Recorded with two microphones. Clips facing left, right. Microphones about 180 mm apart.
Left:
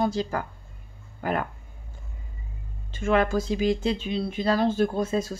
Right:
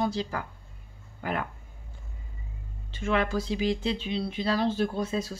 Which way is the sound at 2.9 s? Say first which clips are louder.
Left 4 dB; 45° left (ahead or behind).